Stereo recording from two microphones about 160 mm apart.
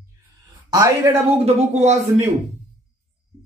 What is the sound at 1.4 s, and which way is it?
Speech, 45° right (ahead or behind).